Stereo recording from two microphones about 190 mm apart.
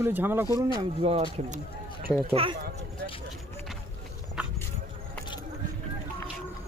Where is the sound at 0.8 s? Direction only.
30° right (ahead or behind).